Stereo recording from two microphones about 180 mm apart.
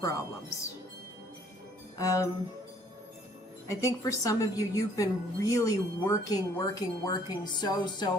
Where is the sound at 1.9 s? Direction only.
20° left (ahead or behind).